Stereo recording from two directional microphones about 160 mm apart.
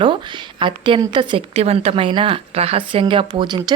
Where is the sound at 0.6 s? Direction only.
30° right (ahead or behind).